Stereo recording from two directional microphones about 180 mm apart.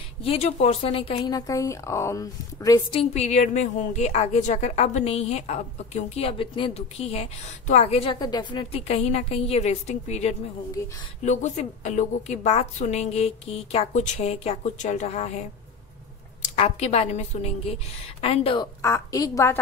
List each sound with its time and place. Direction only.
0.2 s a woman's voice: 35° left (ahead or behind)
1.3 s a woman's voice: 20° left (ahead or behind)
3.0 s a woman's voice: 35° left (ahead or behind)
16.4 s a woman's voice: 35° left (ahead or behind)
18.8 s a woman's voice: 15° left (ahead or behind)